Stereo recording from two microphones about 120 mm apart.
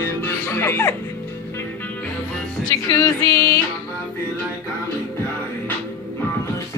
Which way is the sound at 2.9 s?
35° left (ahead or behind).